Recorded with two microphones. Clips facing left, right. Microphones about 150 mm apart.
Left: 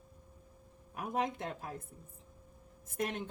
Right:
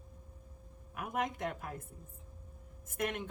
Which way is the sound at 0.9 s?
35° left (ahead or behind).